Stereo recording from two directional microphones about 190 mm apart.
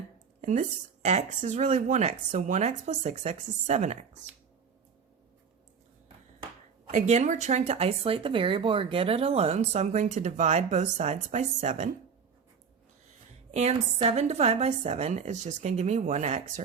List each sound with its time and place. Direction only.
0.4 s speech: 40° right (ahead or behind)
6.9 s speech: 35° right (ahead or behind)
13.5 s speech: 35° right (ahead or behind)